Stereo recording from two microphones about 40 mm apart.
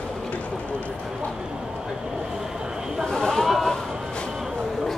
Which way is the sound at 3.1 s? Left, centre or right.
Centre.